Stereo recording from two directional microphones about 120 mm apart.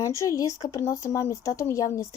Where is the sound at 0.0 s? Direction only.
25° left (ahead or behind).